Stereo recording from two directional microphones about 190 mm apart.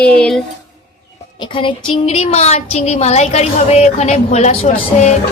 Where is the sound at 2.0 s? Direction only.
35° left (ahead or behind).